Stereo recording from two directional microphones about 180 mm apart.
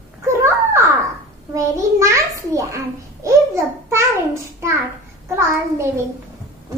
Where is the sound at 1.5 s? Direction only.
15° right (ahead or behind).